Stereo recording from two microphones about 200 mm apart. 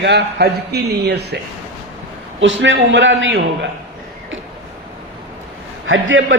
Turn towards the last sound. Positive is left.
turn(degrees=-70)  # may be behind; listen again after turning